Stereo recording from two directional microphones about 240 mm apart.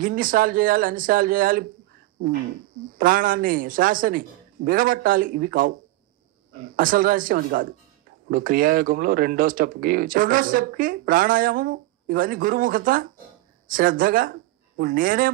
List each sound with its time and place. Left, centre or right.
0.0 s speech: right
3.0 s speech: right